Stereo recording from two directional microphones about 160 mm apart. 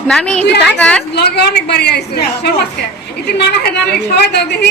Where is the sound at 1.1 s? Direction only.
90° left.